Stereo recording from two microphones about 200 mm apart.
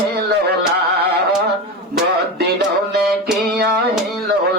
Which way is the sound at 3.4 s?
50° right (ahead or behind).